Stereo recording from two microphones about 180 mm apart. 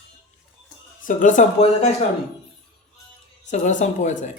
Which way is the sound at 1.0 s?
45° left (ahead or behind).